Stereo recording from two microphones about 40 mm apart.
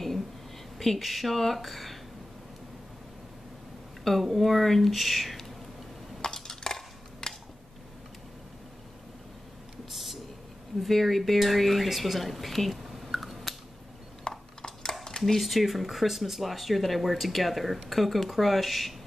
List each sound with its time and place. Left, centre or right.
0.7 s speech: centre
4.0 s speech: centre
6.2 s coin: centre
9.8 s a sound: centre
10.8 s speech: centre
14.3 s a sound: centre
15.4 s speech: centre